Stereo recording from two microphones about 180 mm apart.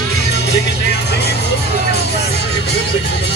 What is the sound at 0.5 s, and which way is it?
Music, 70° left (ahead or behind).